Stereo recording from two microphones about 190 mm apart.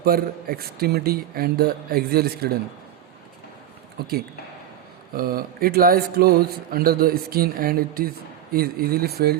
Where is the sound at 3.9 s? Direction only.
55° right (ahead or behind).